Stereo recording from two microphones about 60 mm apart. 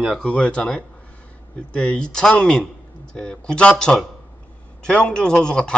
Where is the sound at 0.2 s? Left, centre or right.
Centre.